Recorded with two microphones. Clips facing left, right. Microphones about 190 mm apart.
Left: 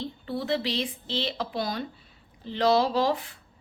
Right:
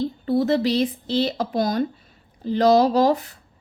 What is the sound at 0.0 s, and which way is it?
Speech, 40° right (ahead or behind).